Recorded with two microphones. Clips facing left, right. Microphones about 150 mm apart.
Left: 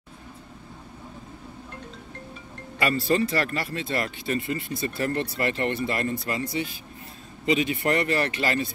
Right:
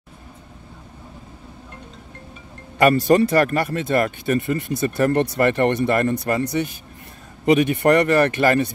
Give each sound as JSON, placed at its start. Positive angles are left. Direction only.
{"t": 2.8, "sound": "speech", "side_deg": -55}